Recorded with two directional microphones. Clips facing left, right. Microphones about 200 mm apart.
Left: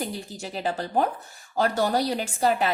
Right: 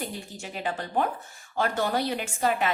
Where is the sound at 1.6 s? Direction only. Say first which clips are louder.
Left 3 dB; 35° left (ahead or behind).